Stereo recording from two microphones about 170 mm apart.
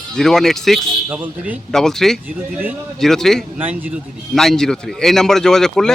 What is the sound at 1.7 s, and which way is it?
Speech, 5° left (ahead or behind).